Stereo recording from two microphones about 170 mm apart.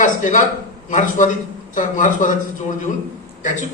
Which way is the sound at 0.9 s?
50° left (ahead or behind).